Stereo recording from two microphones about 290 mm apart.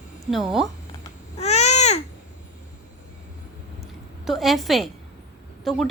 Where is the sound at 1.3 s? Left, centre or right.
Left.